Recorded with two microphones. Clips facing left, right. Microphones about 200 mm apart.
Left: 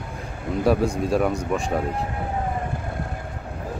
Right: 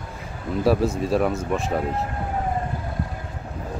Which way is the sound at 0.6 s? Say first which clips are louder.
Even; centre (ahead or behind).